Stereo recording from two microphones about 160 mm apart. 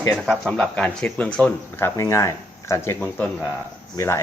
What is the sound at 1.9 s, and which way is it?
Speech, 20° left (ahead or behind).